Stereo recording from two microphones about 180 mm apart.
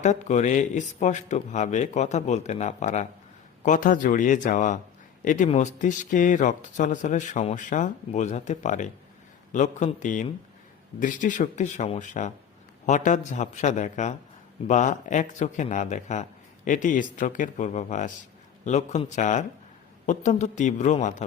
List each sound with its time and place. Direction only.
0.0 s speech: 40° left (ahead or behind)